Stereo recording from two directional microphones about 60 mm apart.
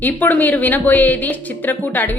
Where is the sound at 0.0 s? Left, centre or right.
Left.